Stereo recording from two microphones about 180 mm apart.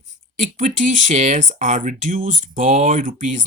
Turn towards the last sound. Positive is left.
turn(degrees=-45)  # may be behind; listen again after turning